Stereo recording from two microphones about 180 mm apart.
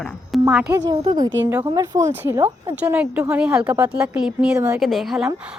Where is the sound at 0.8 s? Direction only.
25° right (ahead or behind).